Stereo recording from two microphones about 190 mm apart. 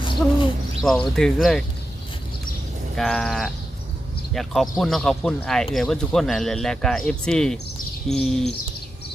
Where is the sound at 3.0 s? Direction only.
Centre (ahead or behind).